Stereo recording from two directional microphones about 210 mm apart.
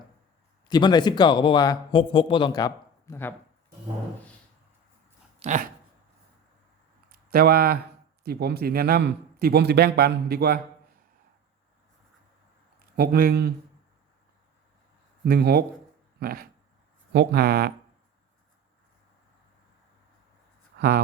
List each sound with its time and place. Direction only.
0.7 s speech: 20° left (ahead or behind)
5.4 s a sound: 35° right (ahead or behind)
7.1 s speech: 45° right (ahead or behind)
13.0 s speech: 45° right (ahead or behind)
15.2 s speech: 50° right (ahead or behind)
20.7 s speech: 50° right (ahead or behind)